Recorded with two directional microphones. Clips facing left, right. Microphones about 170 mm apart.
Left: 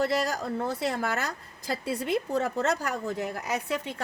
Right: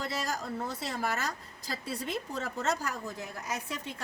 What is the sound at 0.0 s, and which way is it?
Speech, 65° left (ahead or behind).